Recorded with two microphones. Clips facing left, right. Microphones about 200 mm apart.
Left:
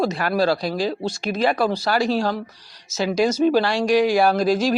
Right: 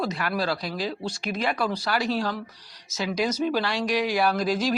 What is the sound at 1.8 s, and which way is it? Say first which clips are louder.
Speech: left 5 dB; 40° left (ahead or behind).